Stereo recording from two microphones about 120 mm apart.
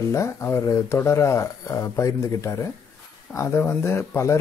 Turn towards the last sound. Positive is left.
turn(degrees=20)  # may be behind; listen again after turning